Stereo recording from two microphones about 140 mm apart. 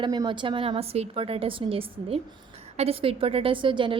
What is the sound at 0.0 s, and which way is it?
A woman's voice, 30° right (ahead or behind).